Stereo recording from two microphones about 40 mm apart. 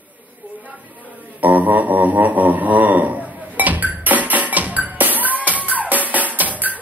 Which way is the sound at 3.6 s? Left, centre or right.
Right.